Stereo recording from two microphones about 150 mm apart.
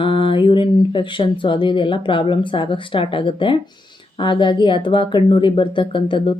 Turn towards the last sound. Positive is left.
turn(degrees=35)  # may be behind; listen again after turning